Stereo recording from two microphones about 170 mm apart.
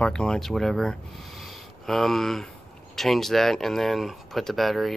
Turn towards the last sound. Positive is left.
turn(degrees=0)  # may be behind; listen again after turning